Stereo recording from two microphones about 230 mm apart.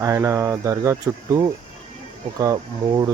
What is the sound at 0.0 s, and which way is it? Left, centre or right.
Speech, centre.